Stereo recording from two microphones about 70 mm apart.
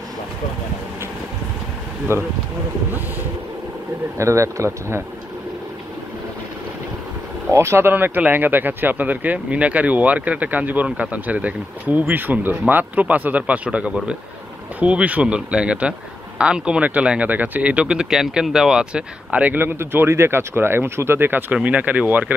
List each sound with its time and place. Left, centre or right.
2.1 s speech: right
4.2 s speech: right
7.5 s speech: right
7.9 s speech: right